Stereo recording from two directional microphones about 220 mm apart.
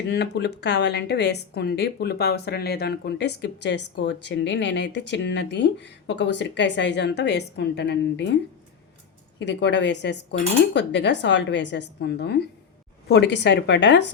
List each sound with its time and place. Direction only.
0.1 s a woman's voice: 50° left (ahead or behind)
9.4 s a woman's voice: 50° left (ahead or behind)